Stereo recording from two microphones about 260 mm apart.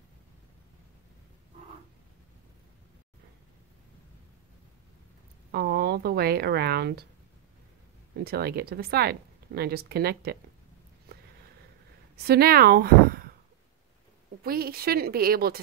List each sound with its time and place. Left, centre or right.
5.5 s speech: right
8.2 s speech: right
12.2 s speech: right
14.4 s speech: right